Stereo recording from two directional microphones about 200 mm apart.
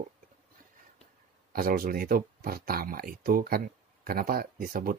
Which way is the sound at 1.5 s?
45° right (ahead or behind).